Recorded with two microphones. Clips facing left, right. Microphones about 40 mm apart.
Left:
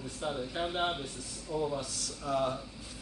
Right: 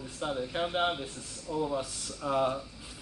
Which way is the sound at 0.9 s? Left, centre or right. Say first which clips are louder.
Right 1 dB; centre.